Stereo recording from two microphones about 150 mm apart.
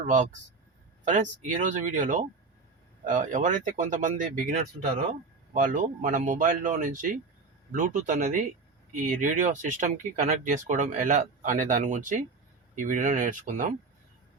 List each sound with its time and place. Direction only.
0.0 s speech: 55° right (ahead or behind)